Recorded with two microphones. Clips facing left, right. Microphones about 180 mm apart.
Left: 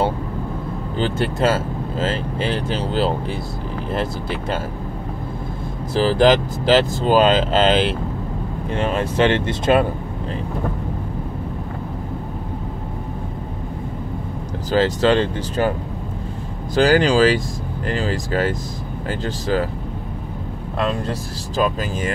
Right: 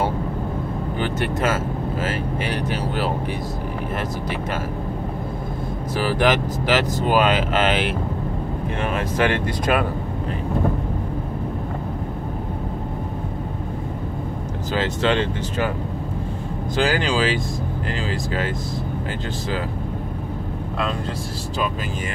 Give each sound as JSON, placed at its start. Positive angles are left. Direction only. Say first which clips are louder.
{"t": 0.9, "sound": "speech", "louder": "left 4 dB", "side_deg": 30}
{"t": 5.9, "sound": "speech", "louder": "left 5 dB", "side_deg": 30}
{"t": 14.7, "sound": "speech", "louder": "left 5 dB", "side_deg": 35}
{"t": 16.7, "sound": "speech", "louder": "left 6 dB", "side_deg": 40}